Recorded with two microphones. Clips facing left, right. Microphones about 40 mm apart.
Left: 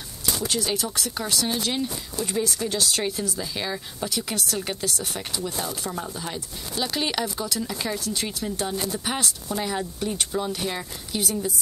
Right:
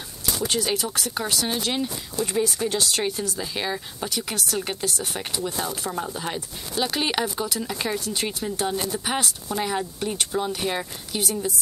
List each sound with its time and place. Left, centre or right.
0.6 s speech: centre
3.3 s speech: centre
11.1 s a woman's voice: centre